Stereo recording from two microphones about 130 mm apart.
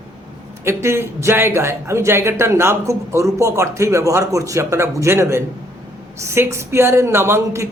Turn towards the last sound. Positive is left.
turn(degrees=-20)  # may be behind; listen again after turning